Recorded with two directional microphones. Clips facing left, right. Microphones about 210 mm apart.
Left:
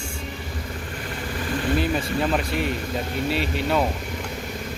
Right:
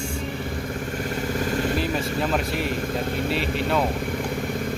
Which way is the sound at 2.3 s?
Centre (ahead or behind).